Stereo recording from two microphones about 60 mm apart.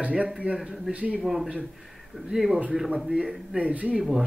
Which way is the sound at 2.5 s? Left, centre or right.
Centre.